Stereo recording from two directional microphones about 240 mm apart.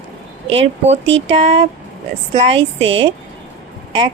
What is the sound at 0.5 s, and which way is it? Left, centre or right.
Speech, right.